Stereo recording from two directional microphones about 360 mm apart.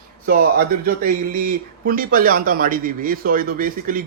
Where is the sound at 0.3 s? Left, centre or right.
Right.